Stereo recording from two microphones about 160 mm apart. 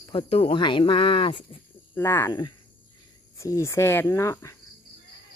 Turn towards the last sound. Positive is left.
turn(degrees=20)  # may be behind; listen again after turning